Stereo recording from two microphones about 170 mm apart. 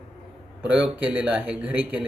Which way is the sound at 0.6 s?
5° right (ahead or behind).